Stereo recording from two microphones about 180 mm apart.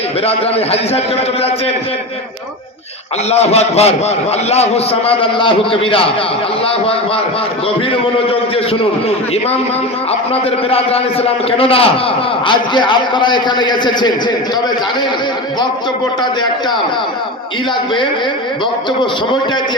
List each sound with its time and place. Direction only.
0.3 s a man's voice: 35° left (ahead or behind)
3.2 s a man's voice: 35° left (ahead or behind)
8.3 s a man's voice: 30° left (ahead or behind)
10.7 s a man's voice: 35° left (ahead or behind)